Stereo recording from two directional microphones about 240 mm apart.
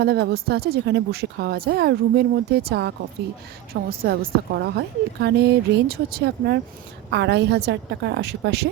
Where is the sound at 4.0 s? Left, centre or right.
Right.